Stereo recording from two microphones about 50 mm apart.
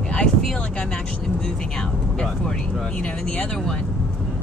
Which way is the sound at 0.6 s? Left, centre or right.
Centre.